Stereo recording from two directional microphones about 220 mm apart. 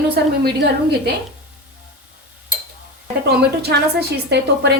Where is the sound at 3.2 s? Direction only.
45° right (ahead or behind).